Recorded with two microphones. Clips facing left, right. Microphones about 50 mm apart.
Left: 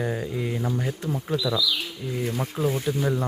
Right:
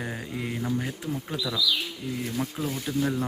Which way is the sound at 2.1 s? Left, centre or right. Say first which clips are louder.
Left 3 dB; left.